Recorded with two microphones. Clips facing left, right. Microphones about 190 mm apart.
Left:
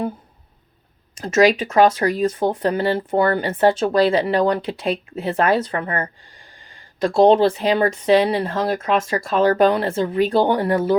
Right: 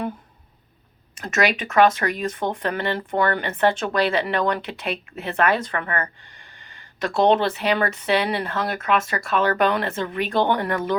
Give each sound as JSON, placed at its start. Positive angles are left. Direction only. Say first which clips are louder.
{"t": 1.2, "sound": "speech", "louder": "left 7 dB", "side_deg": 30}
{"t": 7.2, "sound": "speech", "louder": "left 5 dB", "side_deg": 30}